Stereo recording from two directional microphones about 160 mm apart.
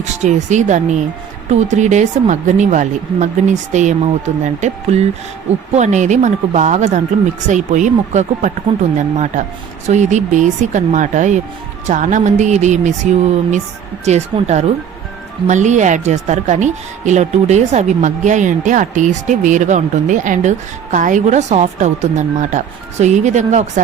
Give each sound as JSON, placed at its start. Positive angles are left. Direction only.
{"t": 0.0, "sound": "speech", "side_deg": -45}
{"t": 14.0, "sound": "speech", "side_deg": -45}